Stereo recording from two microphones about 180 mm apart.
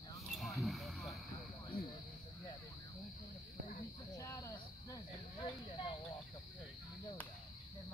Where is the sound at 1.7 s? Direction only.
55° left (ahead or behind).